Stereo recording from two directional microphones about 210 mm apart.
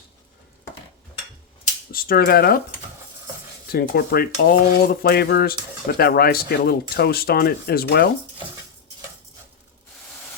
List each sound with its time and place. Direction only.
1.9 s stir: 45° left (ahead or behind)
3.7 s stir: 45° left (ahead or behind)